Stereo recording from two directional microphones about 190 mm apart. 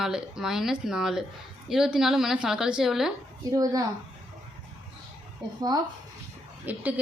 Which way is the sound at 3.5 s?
20° right (ahead or behind).